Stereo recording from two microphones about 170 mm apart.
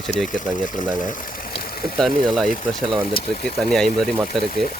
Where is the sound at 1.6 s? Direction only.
60° left (ahead or behind).